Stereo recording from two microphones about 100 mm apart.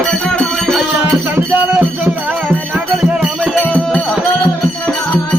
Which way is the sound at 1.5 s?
10° right (ahead or behind).